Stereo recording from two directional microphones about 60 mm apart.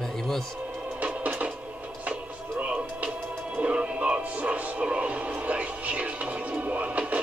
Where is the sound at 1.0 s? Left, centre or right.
Right.